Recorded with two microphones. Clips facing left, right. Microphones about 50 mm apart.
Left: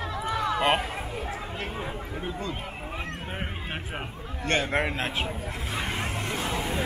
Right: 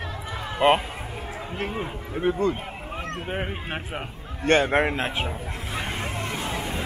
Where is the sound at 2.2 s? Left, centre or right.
Right.